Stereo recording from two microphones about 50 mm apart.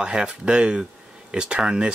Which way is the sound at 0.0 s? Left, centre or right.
Centre.